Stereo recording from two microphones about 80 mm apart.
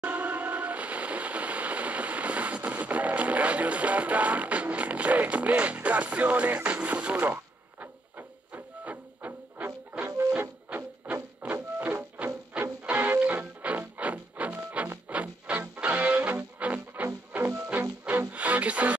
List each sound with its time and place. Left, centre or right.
0.0 s train: centre
10.4 s music: right